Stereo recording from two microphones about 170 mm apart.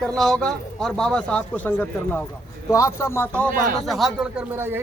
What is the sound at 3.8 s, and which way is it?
Speech, centre (ahead or behind).